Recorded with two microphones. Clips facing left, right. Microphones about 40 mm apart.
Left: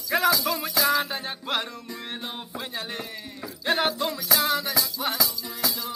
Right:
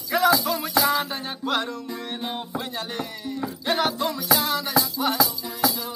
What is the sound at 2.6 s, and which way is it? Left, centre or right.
Music, centre.